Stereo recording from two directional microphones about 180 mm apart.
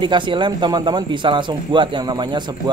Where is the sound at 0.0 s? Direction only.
25° right (ahead or behind).